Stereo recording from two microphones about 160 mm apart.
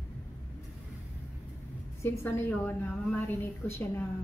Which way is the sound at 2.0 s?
15° left (ahead or behind).